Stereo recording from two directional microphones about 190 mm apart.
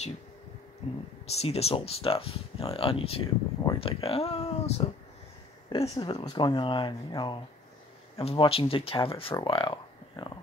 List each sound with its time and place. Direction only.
0.8 s speech: 35° left (ahead or behind)